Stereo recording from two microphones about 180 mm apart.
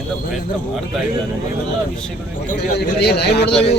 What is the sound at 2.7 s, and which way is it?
A man's voice, 65° left (ahead or behind).